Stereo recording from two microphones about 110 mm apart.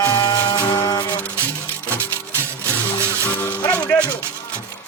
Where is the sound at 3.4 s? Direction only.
15° left (ahead or behind).